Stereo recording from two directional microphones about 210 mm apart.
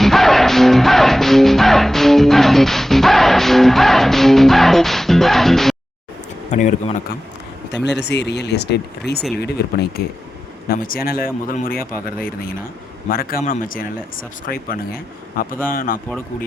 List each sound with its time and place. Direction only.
0.0 s music: centre (ahead or behind)
6.5 s speech: 35° left (ahead or behind)
7.7 s speech: 55° left (ahead or behind)